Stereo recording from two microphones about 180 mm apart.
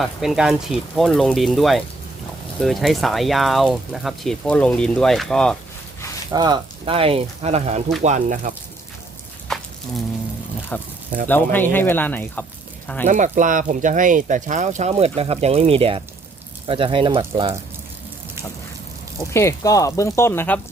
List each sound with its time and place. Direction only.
0.0 s speech: centre (ahead or behind)
6.3 s speech: 25° right (ahead or behind); by 8.5 s 45° right (ahead or behind)
9.5 s a sound: centre (ahead or behind)
10.7 s speech: 10° left (ahead or behind)
13.1 s speech: 45° right (ahead or behind)
19.3 s speech: 15° left (ahead or behind)